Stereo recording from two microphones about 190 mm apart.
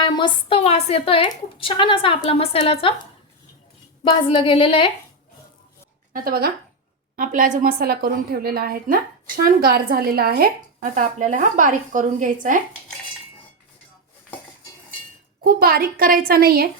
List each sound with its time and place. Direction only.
0.0 s a woman's voice: 25° left (ahead or behind)
4.0 s a woman's voice: 25° left (ahead or behind)
6.1 s a woman's voice: 50° right (ahead or behind)
15.4 s a woman's voice: 50° right (ahead or behind)